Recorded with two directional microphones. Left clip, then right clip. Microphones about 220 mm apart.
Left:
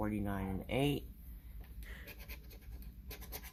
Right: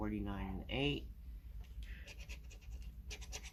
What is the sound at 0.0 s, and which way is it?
Speech, 45° left (ahead or behind).